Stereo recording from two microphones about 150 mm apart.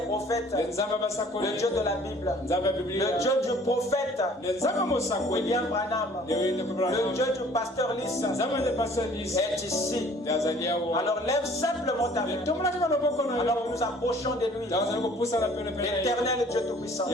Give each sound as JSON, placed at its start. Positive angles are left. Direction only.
{"t": 0.5, "sound": "speech", "side_deg": 20}